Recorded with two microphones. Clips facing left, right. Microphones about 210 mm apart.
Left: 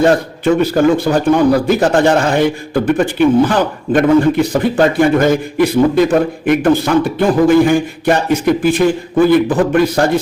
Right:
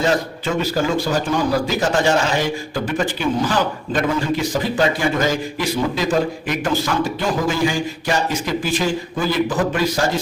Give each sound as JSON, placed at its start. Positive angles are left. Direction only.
{"t": 0.0, "sound": "a man's voice", "side_deg": 55}